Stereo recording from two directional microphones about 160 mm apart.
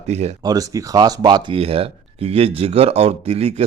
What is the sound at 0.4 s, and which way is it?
Speech, 20° right (ahead or behind).